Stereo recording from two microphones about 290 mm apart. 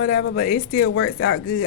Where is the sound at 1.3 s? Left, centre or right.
Left.